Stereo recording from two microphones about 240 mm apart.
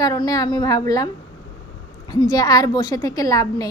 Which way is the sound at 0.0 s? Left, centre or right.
Centre.